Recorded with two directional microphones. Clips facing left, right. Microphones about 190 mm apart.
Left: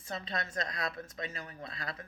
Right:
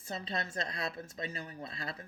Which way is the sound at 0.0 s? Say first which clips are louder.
Even; 30° right (ahead or behind).